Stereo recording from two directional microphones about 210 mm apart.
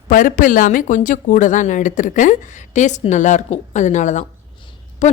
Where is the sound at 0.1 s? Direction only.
40° left (ahead or behind).